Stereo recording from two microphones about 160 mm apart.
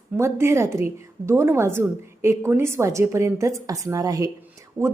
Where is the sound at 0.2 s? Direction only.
15° right (ahead or behind).